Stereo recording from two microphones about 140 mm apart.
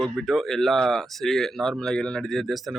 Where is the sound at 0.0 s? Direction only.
Centre (ahead or behind).